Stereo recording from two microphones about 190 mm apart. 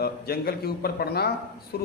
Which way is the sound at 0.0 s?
55° left (ahead or behind).